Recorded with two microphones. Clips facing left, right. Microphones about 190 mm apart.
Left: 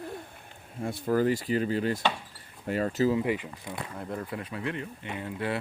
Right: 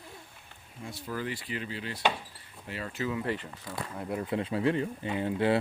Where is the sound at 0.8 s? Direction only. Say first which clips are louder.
Left 10 dB; 55° left (ahead or behind); by 3.2 s 40° left (ahead or behind).